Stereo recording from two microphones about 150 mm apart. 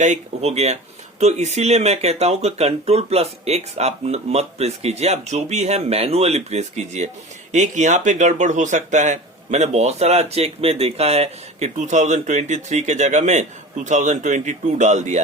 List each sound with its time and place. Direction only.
0.0 s speech: 50° right (ahead or behind)